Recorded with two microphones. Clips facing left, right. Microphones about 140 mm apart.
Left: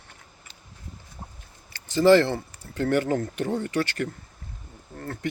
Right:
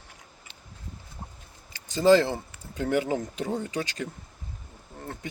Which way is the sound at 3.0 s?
10° right (ahead or behind).